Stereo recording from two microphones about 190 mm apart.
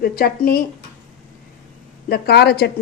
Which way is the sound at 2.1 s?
60° left (ahead or behind).